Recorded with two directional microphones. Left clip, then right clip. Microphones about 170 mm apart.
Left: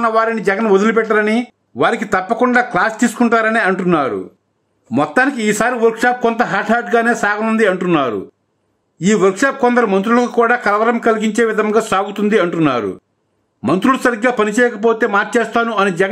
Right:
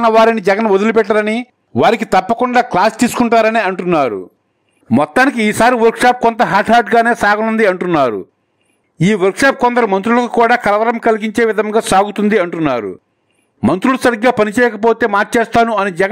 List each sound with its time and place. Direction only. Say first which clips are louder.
0.0 s speech: right 5 dB; 45° right (ahead or behind)